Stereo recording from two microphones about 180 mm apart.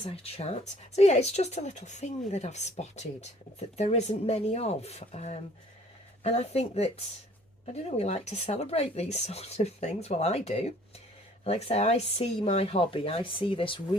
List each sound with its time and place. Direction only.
0.0 s speech: 35° left (ahead or behind)